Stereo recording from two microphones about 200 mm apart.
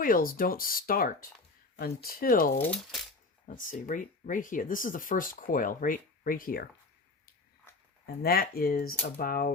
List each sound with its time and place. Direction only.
0.0 s speech: 45° left (ahead or behind)
2.6 s speech: 5° left (ahead or behind)
3.4 s speech: 40° left (ahead or behind)
8.0 s speech: 50° left (ahead or behind)